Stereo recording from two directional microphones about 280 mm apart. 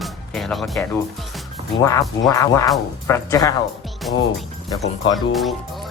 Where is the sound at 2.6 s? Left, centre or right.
Centre.